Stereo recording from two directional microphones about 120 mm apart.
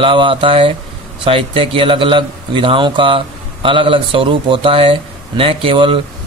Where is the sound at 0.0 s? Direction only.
45° right (ahead or behind).